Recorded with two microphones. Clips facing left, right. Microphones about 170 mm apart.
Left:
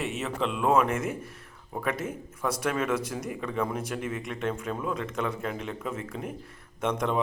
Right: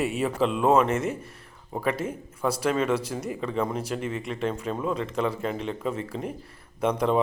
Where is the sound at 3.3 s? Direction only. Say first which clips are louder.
Right 3 dB; centre (ahead or behind).